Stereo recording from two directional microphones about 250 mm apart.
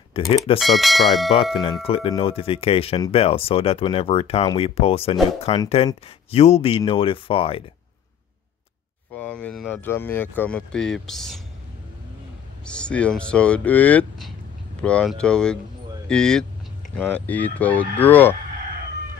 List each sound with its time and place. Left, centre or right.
0.1 s speech: left
0.6 s speech: centre
1.3 s speech: left
9.1 s speech: centre
12.6 s speech: centre